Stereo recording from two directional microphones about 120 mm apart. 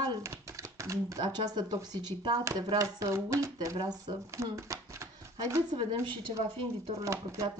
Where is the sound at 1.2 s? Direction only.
35° right (ahead or behind).